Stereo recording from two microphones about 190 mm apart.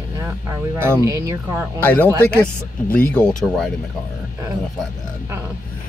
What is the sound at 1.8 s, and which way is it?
Speech, 10° left (ahead or behind).